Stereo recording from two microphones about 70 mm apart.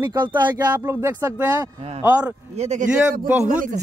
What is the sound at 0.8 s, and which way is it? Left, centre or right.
Speech, right.